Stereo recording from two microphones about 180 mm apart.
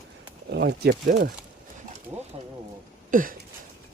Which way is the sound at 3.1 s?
50° right (ahead or behind).